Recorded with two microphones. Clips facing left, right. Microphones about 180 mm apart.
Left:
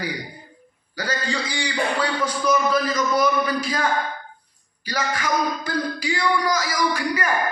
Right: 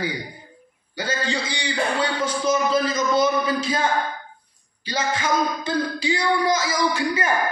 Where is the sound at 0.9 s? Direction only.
25° right (ahead or behind).